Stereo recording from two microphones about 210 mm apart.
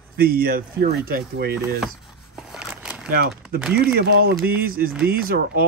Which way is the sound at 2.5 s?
5° right (ahead or behind).